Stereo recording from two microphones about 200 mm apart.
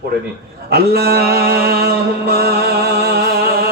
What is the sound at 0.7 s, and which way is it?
Mantra, 50° right (ahead or behind).